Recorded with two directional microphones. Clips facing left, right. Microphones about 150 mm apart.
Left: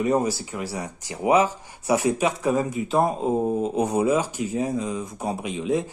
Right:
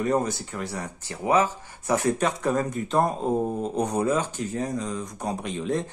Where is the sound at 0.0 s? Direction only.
10° left (ahead or behind).